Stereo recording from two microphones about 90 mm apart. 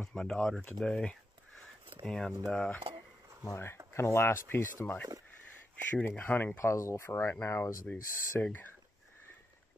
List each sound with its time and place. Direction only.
0.0 s speech: 5° left (ahead or behind)
3.4 s speech: 30° left (ahead or behind)
5.9 s speech: 20° left (ahead or behind)
6.6 s speech: 35° left (ahead or behind)
8.4 s speech: 15° left (ahead or behind)